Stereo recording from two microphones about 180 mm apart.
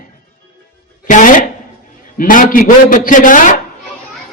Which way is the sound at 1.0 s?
45° left (ahead or behind).